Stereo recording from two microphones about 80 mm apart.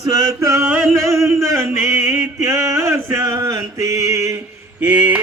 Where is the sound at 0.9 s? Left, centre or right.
Right.